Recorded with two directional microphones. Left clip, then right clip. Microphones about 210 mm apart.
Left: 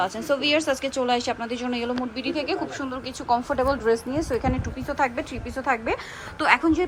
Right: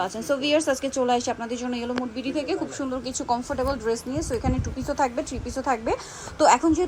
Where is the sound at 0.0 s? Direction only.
10° right (ahead or behind).